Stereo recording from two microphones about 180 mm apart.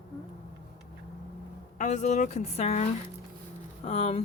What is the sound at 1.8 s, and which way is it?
Speech, 40° left (ahead or behind).